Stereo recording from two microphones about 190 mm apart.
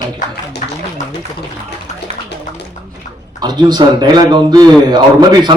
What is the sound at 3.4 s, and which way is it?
Speech, 20° right (ahead or behind).